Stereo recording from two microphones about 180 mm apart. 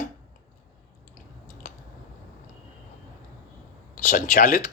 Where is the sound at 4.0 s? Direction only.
45° left (ahead or behind).